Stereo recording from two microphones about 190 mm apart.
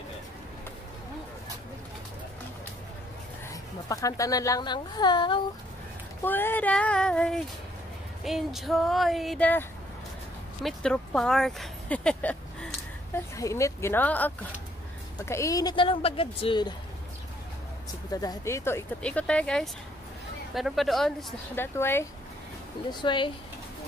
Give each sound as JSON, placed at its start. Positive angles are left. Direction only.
{"t": 3.9, "sound": "speech", "side_deg": 15}
{"t": 6.2, "sound": "speech", "side_deg": 10}
{"t": 18.1, "sound": "speech", "side_deg": 20}
{"t": 21.7, "sound": "speech", "side_deg": 10}
{"t": 22.8, "sound": "speech", "side_deg": 25}